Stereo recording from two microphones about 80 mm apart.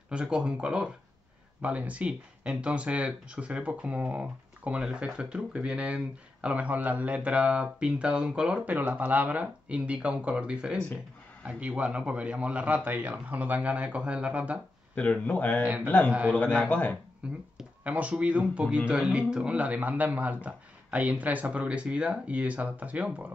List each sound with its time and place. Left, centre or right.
0.1 s speech: centre
15.0 s speech: centre
16.1 s speech: centre
16.6 s speech: left
17.2 s speech: centre